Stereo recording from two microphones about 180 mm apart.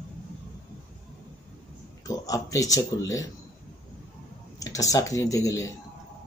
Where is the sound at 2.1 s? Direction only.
20° left (ahead or behind).